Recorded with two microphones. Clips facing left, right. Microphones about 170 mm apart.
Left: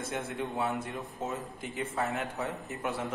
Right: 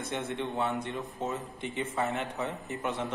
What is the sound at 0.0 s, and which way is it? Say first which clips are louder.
A man's voice: right 1 dB; centre (ahead or behind).